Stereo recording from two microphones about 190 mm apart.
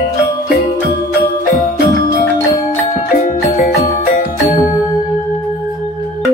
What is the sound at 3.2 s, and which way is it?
Music, 40° left (ahead or behind).